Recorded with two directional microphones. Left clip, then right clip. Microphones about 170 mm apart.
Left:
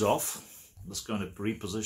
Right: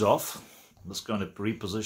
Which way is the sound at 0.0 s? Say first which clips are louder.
Right 3 dB; 25° right (ahead or behind).